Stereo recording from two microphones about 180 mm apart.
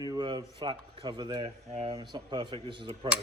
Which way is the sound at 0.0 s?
25° right (ahead or behind).